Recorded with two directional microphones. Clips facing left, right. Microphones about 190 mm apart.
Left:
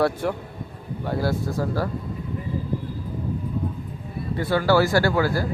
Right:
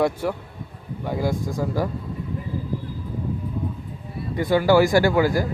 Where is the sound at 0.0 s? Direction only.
10° right (ahead or behind).